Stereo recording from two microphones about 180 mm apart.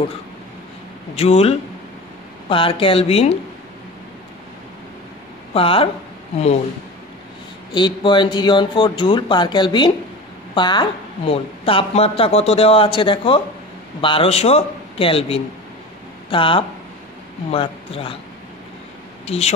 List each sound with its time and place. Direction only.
1.1 s a woman's voice: 35° left (ahead or behind)
2.5 s a woman's voice: 30° left (ahead or behind)
5.5 s a woman's voice: 30° left (ahead or behind)
7.7 s a woman's voice: 25° left (ahead or behind)
19.2 s speech: 35° left (ahead or behind)